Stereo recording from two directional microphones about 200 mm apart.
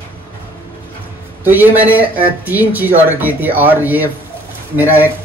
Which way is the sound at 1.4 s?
10° right (ahead or behind).